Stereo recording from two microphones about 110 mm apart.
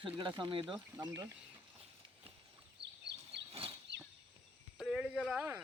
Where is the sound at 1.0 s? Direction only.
30° right (ahead or behind).